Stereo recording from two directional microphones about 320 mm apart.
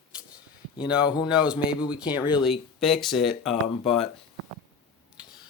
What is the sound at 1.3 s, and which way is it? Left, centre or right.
Speech, centre.